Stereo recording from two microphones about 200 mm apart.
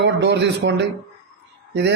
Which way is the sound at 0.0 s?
60° right (ahead or behind).